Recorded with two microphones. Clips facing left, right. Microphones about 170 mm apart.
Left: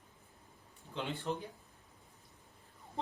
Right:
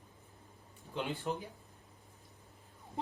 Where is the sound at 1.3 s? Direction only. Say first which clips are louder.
Left 1 dB; 10° right (ahead or behind).